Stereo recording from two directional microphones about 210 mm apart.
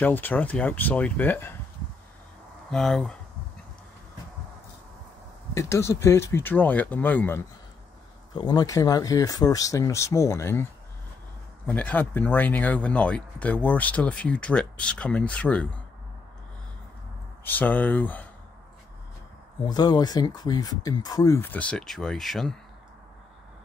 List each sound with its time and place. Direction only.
0.0 s speech: 10° left (ahead or behind)
2.7 s speech: centre (ahead or behind)
5.5 s speech: 15° left (ahead or behind)
8.4 s speech: 20° left (ahead or behind)
17.5 s speech: 10° left (ahead or behind)
19.6 s speech: 20° left (ahead or behind); by 22.6 s centre (ahead or behind)